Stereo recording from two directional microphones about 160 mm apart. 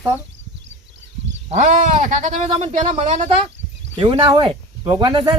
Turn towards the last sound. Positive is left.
turn(degrees=-30)  # may be behind; listen again after turning